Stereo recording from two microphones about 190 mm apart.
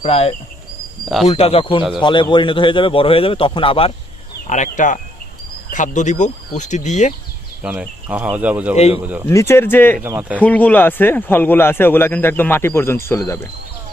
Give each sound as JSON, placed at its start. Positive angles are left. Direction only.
{"t": 0.0, "sound": "speech", "side_deg": 35}
{"t": 1.0, "sound": "speech", "side_deg": 0}
{"t": 1.3, "sound": "speech", "side_deg": 30}
{"t": 4.4, "sound": "speech", "side_deg": 40}
{"t": 7.6, "sound": "speech", "side_deg": -5}
{"t": 9.2, "sound": "speech", "side_deg": 15}
{"t": 10.0, "sound": "speech", "side_deg": -10}
{"t": 10.3, "sound": "speech", "side_deg": 10}